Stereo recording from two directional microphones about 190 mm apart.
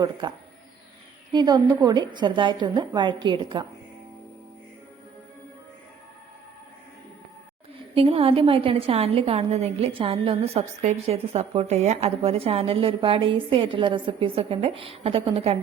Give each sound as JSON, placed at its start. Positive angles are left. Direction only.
{"t": 0.0, "sound": "a woman's voice", "side_deg": -25}
{"t": 7.9, "sound": "a woman's voice", "side_deg": -30}